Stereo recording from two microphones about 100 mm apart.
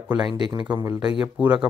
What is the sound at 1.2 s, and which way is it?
Speech, 10° right (ahead or behind).